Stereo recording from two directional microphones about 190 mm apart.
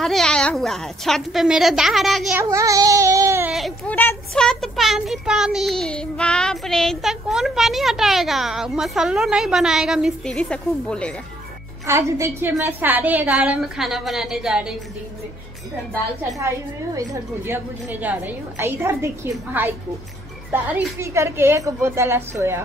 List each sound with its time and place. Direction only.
0.0 s a child's voice: 5° left (ahead or behind)
2.4 s baby cry: 15° right (ahead or behind)
3.5 s a child's voice: 5° left (ahead or behind)
11.8 s a woman's voice: 15° right (ahead or behind)
16.3 s a woman's voice: 15° right (ahead or behind)